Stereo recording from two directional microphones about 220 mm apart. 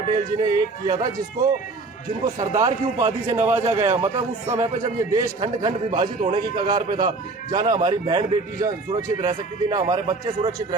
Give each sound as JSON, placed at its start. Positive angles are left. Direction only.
{"t": 0.3, "sound": "a man's voice", "side_deg": -15}
{"t": 3.8, "sound": "a man's voice", "side_deg": -30}
{"t": 4.4, "sound": "a man's voice", "side_deg": -15}